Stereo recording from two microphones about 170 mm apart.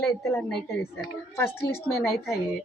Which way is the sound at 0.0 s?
15° left (ahead or behind).